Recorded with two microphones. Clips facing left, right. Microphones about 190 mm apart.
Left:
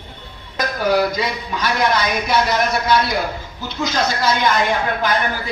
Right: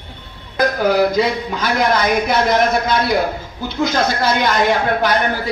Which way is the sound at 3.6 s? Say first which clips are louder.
Right 3 dB; 55° right (ahead or behind).